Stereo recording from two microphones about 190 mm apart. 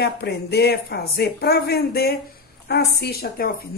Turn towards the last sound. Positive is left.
turn(degrees=55)  # may be behind; listen again after turning